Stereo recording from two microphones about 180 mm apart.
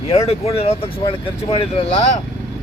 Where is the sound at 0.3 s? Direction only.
35° left (ahead or behind).